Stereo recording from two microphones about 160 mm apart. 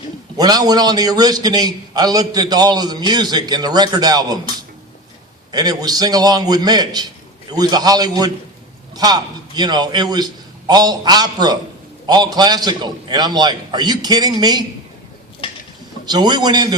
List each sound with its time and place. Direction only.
0.3 s a man's voice: 25° right (ahead or behind)
5.5 s a man's voice: 25° right (ahead or behind)
15.4 s a sound: 35° left (ahead or behind)
16.0 s a man's voice: 25° right (ahead or behind)